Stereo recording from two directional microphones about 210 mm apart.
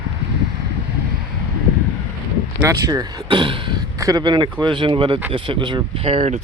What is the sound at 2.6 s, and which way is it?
Speech, 15° right (ahead or behind).